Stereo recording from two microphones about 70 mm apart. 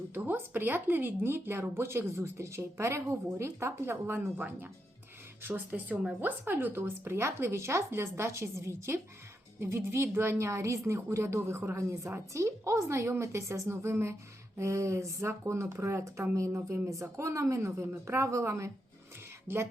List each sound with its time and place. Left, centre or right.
0.1 s a woman's voice: right